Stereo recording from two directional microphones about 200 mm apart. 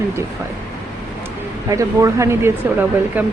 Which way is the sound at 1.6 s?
15° right (ahead or behind).